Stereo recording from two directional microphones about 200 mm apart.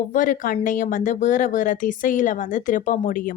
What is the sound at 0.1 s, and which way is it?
Speech, 40° left (ahead or behind).